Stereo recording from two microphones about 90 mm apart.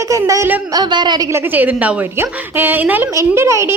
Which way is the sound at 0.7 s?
55° right (ahead or behind).